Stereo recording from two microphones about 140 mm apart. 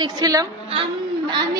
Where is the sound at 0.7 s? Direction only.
35° right (ahead or behind).